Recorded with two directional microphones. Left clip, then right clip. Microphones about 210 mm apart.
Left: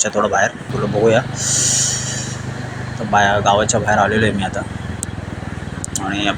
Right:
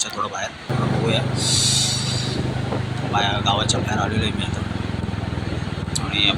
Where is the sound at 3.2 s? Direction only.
25° left (ahead or behind).